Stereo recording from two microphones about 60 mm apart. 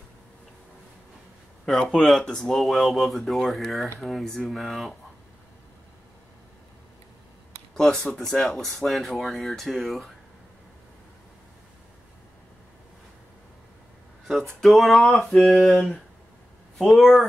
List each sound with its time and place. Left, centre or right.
1.7 s speech: centre
7.7 s speech: centre
14.6 s speech: centre